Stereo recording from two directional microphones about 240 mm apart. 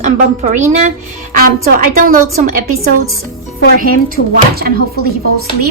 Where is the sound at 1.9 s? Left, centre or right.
Right.